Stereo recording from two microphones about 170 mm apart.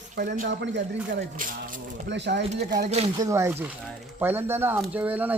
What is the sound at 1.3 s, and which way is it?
Speech, 50° right (ahead or behind).